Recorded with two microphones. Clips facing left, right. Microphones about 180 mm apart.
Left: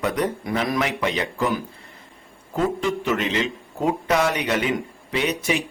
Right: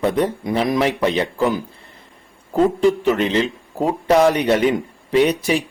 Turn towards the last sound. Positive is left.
turn(degrees=-35)  # may be behind; listen again after turning